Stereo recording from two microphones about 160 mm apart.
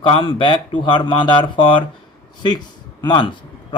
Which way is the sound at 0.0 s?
30° left (ahead or behind).